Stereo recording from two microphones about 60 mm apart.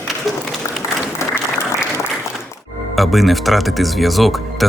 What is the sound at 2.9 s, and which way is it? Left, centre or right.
Speech, centre.